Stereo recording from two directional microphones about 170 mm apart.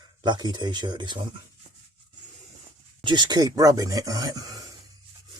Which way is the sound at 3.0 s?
25° right (ahead or behind).